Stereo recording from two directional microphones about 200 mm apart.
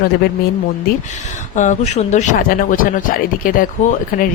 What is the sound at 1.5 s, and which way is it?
Speech, 35° left (ahead or behind).